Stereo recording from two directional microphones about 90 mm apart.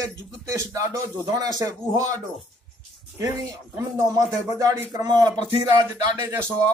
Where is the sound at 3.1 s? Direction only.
35° right (ahead or behind).